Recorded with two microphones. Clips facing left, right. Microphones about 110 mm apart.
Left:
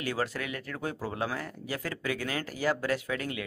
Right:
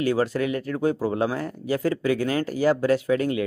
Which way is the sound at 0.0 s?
30° right (ahead or behind).